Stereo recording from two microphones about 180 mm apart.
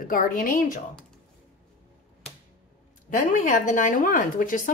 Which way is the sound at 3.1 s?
45° left (ahead or behind).